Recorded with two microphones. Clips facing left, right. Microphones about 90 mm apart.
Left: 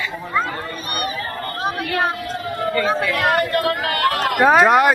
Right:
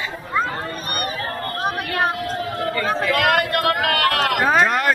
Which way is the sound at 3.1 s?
75° right (ahead or behind).